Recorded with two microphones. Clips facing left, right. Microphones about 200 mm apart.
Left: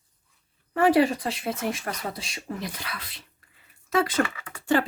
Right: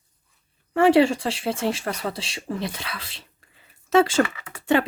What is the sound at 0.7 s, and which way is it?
Speech, 25° right (ahead or behind).